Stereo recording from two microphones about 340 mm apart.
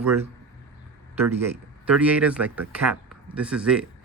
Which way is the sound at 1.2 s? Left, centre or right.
Centre.